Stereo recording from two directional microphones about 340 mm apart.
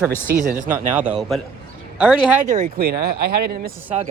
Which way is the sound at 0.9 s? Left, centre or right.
Centre.